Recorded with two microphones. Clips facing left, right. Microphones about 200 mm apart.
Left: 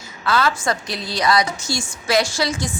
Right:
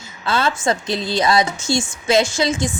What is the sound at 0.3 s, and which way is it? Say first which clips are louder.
A woman's voice: right 1 dB; 25° right (ahead or behind).